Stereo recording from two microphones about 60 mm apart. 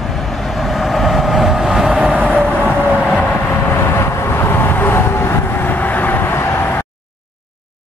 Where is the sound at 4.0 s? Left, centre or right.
Left.